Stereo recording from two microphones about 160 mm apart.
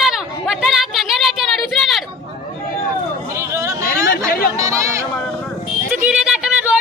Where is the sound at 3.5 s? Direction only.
20° right (ahead or behind).